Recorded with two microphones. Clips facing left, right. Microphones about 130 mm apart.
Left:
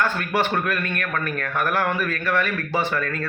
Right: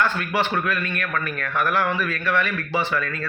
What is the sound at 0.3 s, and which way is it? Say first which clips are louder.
A man's voice: left 1 dB; 50° left (ahead or behind).